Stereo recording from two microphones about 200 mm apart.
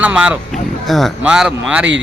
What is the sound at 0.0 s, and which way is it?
Speech, 5° right (ahead or behind).